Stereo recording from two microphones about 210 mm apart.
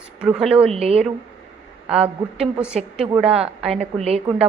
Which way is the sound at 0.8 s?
30° right (ahead or behind).